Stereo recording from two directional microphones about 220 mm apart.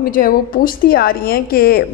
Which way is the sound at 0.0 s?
40° left (ahead or behind).